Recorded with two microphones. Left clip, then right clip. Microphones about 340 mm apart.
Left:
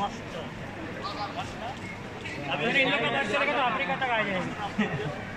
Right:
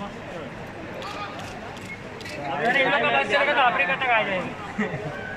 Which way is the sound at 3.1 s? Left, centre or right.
Right.